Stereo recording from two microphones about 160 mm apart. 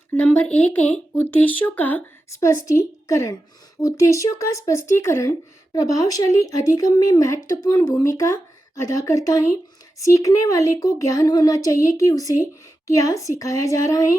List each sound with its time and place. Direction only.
0.1 s speech: 10° left (ahead or behind)